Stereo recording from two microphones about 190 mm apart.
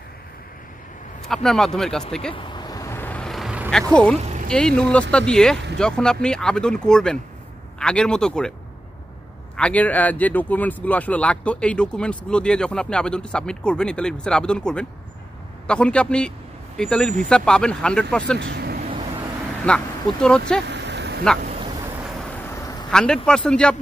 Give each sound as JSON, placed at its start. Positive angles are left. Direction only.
{"t": 1.2, "sound": "speech", "side_deg": 0}
{"t": 2.3, "sound": "vehicle", "side_deg": 25}
{"t": 3.7, "sound": "speech", "side_deg": 5}
{"t": 4.2, "sound": "vehicle", "side_deg": -35}
{"t": 4.5, "sound": "speech", "side_deg": 5}
{"t": 9.6, "sound": "a man's voice", "side_deg": 5}
{"t": 18.4, "sound": "speech", "side_deg": -60}
{"t": 19.6, "sound": "speech", "side_deg": 5}
{"t": 20.6, "sound": "a sound", "side_deg": -65}
{"t": 22.8, "sound": "speech", "side_deg": 5}